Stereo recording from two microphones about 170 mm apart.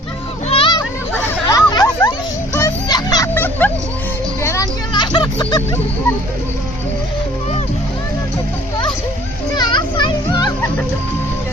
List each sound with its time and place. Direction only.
0.5 s children playing: 30° left (ahead or behind)
0.8 s children playing: 20° left (ahead or behind)
3.3 s music: 10° left (ahead or behind)
4.4 s vehicle: 20° left (ahead or behind)
9.6 s music: 25° left (ahead or behind)